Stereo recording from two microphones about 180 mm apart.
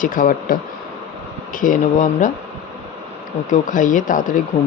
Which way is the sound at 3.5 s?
45° left (ahead or behind).